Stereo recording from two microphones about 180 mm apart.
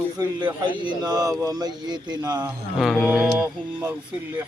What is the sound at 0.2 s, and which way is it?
Speech, 25° right (ahead or behind).